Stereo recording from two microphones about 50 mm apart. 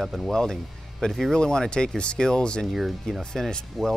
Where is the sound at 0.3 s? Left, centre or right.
Centre.